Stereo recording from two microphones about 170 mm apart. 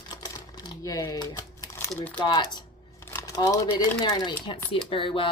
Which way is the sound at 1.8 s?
10° left (ahead or behind).